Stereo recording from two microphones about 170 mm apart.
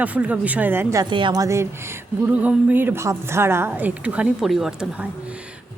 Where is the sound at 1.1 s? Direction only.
25° right (ahead or behind); by 5.0 s 5° right (ahead or behind).